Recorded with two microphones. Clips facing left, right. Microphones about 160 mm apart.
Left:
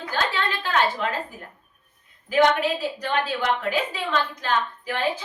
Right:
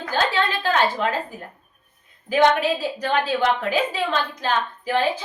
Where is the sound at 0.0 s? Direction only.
35° right (ahead or behind).